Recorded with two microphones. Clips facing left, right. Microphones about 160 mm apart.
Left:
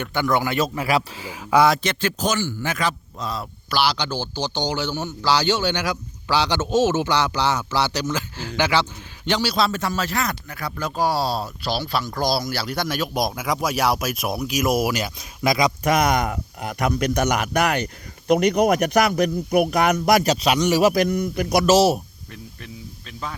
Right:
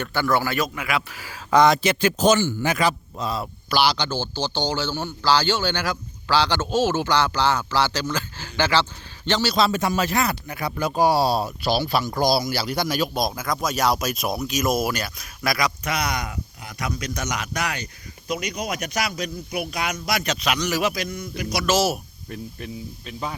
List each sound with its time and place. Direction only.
0.0 s a man's voice: 15° left (ahead or behind); by 1.0 s 35° left (ahead or behind)
1.5 s speech: 5° left (ahead or behind)
1.8 s a man's voice: 10° right (ahead or behind); by 9.6 s 10° left (ahead or behind)
9.7 s speech: 15° right (ahead or behind)
13.0 s a man's voice: 10° left (ahead or behind)
15.8 s speech: 45° left (ahead or behind)
20.2 s a man's voice: 35° left (ahead or behind)
20.9 s speech: 60° left (ahead or behind)
21.7 s a man's voice: 30° left (ahead or behind)
22.3 s speech: 20° right (ahead or behind)